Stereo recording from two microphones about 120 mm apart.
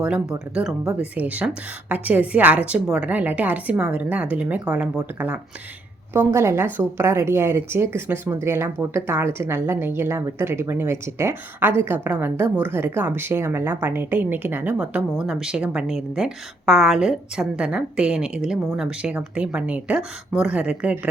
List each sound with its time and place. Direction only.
0.0 s a woman's voice: 5° right (ahead or behind)
6.1 s a woman's voice: 20° right (ahead or behind)